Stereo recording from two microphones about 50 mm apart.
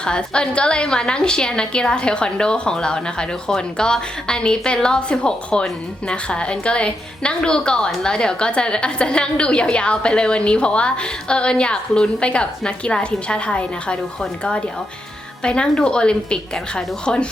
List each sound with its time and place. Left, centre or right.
0.0 s a woman's voice: centre